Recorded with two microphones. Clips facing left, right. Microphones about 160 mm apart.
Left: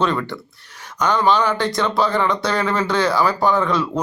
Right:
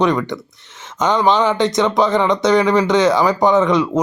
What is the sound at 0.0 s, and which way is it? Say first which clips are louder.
Speech: right 4 dB; 15° right (ahead or behind).